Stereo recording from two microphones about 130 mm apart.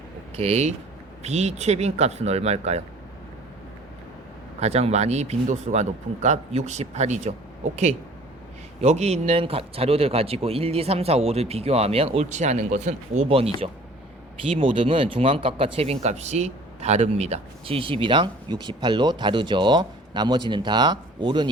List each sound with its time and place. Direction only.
0.3 s speech: 55° right (ahead or behind)
4.6 s speech: 55° right (ahead or behind)
8.8 s speech: 60° right (ahead or behind)
13.2 s speech: 45° right (ahead or behind)
14.5 s speech: 45° right (ahead or behind)